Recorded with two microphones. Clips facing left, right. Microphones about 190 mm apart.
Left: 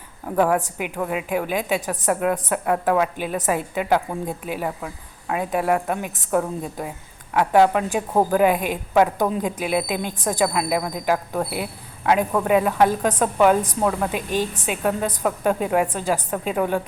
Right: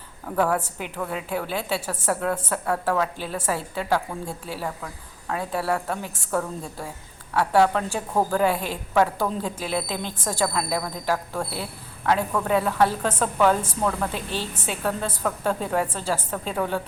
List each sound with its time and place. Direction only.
0.3 s a woman's voice: 15° left (ahead or behind)